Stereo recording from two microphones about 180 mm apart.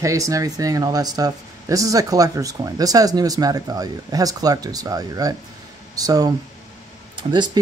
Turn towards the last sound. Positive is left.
turn(degrees=-25)  # may be behind; listen again after turning